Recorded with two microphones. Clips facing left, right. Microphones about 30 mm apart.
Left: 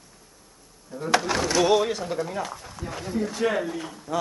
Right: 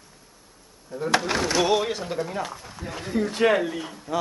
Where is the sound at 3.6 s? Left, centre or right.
Centre.